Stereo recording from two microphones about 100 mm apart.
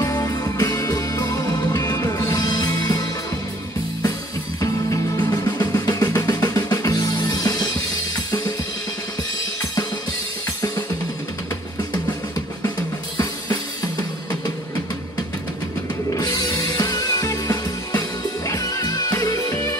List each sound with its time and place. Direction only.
0.2 s music: 40° left (ahead or behind)
4.6 s music: 35° left (ahead or behind)
16.2 s music: 40° left (ahead or behind)